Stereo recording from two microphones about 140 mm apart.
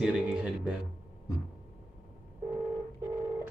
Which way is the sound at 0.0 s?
5° right (ahead or behind).